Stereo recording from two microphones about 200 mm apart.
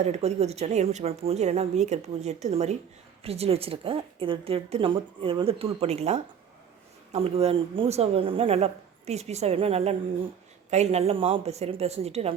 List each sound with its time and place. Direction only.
0.0 s a woman's voice: 35° right (ahead or behind)